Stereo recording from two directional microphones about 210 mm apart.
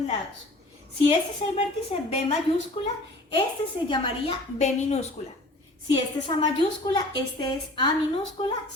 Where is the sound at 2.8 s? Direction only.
30° left (ahead or behind).